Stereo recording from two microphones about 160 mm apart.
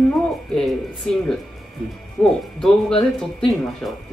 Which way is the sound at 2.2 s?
10° left (ahead or behind).